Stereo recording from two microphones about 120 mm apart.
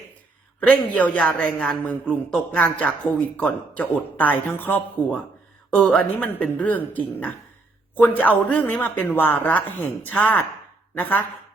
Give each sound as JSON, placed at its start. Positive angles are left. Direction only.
{"t": 0.7, "sound": "a man's voice", "side_deg": 10}